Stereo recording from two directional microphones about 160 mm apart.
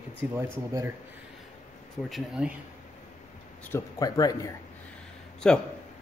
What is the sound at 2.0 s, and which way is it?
Speech, centre (ahead or behind).